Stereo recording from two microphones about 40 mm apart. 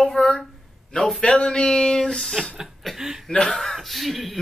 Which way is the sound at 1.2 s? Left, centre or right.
Left.